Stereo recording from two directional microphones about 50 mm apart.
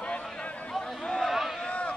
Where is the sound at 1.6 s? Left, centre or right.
Left.